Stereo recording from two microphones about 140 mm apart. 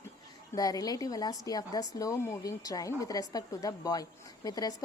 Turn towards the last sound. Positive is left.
turn(degrees=25)  # may be behind; listen again after turning